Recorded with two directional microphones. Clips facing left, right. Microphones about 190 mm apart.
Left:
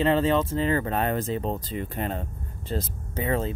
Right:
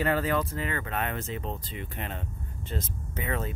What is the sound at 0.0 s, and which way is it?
Speech, 25° left (ahead or behind).